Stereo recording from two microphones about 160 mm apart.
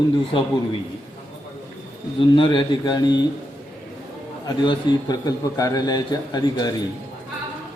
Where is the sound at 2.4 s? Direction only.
30° left (ahead or behind).